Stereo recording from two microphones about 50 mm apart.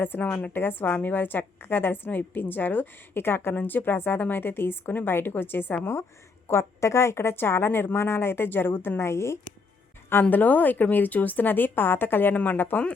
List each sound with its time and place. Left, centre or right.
0.2 s a woman's voice: left
0.5 s a woman's voice: left
5.8 s speech: left
6.5 s speech: left
10.1 s a woman's voice: left